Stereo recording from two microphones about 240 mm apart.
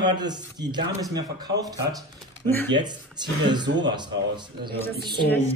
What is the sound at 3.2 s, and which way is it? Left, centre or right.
A man's voice, centre.